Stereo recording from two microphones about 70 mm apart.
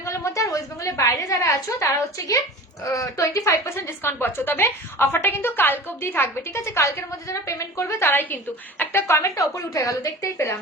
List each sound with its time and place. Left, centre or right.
0.0 s a woman's voice: left
3.8 s a woman's voice: left